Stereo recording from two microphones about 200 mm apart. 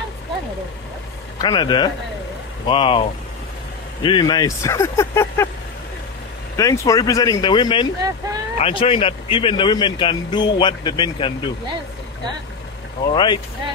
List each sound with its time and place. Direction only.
1.4 s a man's voice: 20° left (ahead or behind)
4.0 s speech: 20° left (ahead or behind)
6.5 s a man's voice: 15° left (ahead or behind)
13.1 s a man's voice: 25° left (ahead or behind)